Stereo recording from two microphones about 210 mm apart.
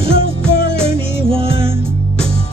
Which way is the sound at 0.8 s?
25° right (ahead or behind).